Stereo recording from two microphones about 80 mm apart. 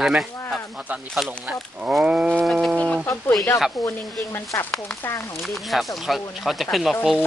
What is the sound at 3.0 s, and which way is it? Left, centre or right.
Speech, left.